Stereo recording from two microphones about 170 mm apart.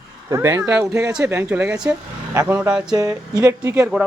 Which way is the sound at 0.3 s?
15° right (ahead or behind).